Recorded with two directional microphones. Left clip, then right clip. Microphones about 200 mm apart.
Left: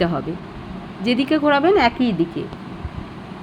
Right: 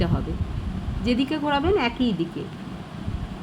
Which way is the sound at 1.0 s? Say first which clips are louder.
Left 7 dB; 10° left (ahead or behind).